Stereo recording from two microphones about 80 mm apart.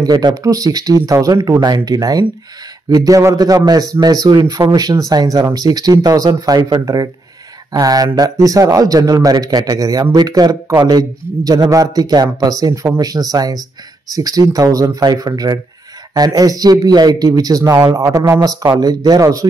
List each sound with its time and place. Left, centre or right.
0.0 s a man's voice: right
3.3 s speech: right
7.8 s a man's voice: right